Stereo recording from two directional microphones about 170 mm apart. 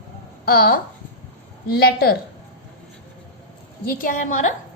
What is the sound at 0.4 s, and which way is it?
Speech, 60° left (ahead or behind).